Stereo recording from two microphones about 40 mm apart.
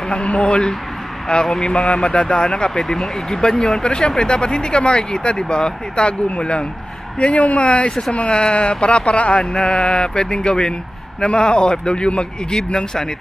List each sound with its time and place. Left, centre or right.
0.1 s speech: left